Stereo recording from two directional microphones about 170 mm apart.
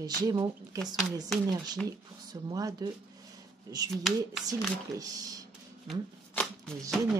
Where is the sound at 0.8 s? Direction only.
Centre (ahead or behind).